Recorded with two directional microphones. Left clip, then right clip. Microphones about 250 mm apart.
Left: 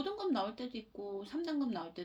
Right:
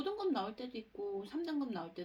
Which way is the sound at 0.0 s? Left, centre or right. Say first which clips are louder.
Left 1 dB; left.